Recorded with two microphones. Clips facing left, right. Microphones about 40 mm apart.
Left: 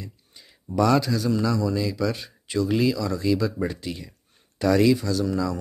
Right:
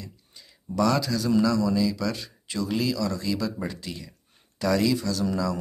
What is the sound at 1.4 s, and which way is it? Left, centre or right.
Speech, centre.